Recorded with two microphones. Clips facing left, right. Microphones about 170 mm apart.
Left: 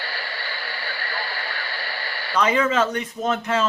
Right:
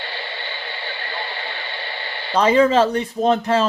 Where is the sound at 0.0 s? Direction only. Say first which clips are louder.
Right 2 dB; 25° right (ahead or behind).